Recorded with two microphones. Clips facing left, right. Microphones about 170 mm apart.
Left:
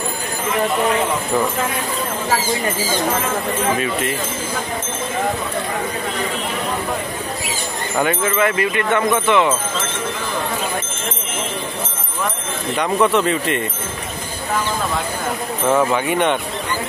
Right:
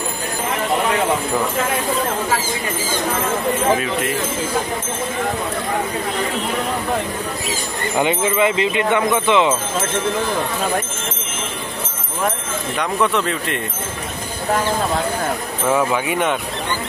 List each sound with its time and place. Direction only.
8.0 s speech: 15° right (ahead or behind)
12.7 s speech: centre (ahead or behind)
15.7 s speech: 5° right (ahead or behind)